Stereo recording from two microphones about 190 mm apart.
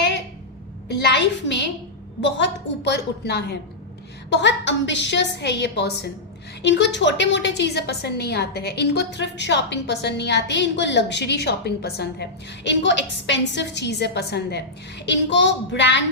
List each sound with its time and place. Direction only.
0.9 s a woman's voice: 65° left (ahead or behind)